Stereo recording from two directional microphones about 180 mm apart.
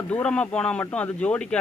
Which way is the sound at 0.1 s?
5° left (ahead or behind).